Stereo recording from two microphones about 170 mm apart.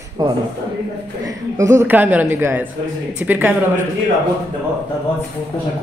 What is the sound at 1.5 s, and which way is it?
Speech, 15° right (ahead or behind).